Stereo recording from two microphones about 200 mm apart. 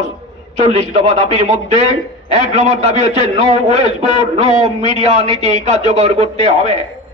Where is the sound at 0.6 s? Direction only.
35° right (ahead or behind).